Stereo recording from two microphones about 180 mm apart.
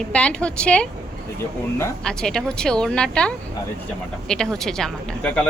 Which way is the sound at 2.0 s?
5° left (ahead or behind).